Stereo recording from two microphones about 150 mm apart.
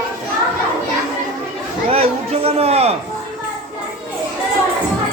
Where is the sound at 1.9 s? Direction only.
40° right (ahead or behind).